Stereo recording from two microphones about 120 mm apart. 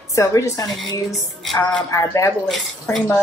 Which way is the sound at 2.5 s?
5° left (ahead or behind).